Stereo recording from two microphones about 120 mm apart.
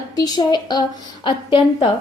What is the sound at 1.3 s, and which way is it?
Speech, 45° left (ahead or behind).